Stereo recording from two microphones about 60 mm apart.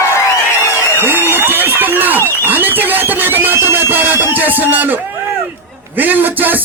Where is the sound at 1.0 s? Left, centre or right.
Right.